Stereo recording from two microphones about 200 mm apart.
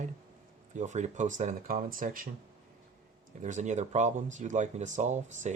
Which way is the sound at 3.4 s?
35° right (ahead or behind).